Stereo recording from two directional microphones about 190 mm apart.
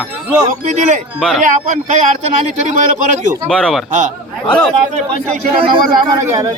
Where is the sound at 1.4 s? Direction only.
40° right (ahead or behind).